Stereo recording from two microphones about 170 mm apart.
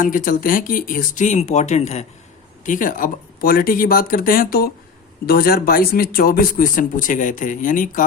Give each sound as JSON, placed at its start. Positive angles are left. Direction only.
{"t": 0.0, "sound": "speech", "side_deg": 55}